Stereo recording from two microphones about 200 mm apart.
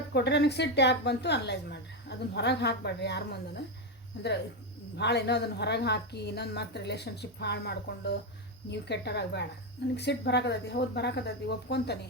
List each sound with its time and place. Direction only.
0.1 s a woman's voice: 55° left (ahead or behind)